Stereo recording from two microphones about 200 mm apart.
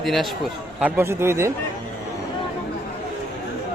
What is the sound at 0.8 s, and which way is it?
Speech, 10° right (ahead or behind).